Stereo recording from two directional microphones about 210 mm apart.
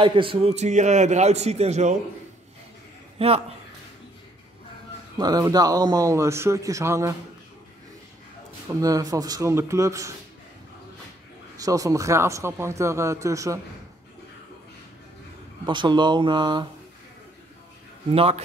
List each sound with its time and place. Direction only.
0.0 s a man's voice: 25° right (ahead or behind)
3.2 s speech: 30° right (ahead or behind)
5.2 s speech: 20° right (ahead or behind)
8.6 s speech: 15° right (ahead or behind)
11.5 s speech: 15° right (ahead or behind)
15.6 s speech: 20° right (ahead or behind)
18.1 s speech: 30° right (ahead or behind)